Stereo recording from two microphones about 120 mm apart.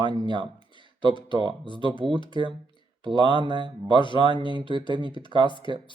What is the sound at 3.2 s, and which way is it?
Speech, 40° right (ahead or behind).